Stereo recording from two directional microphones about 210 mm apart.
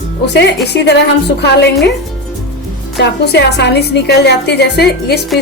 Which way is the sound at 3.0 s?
55° left (ahead or behind).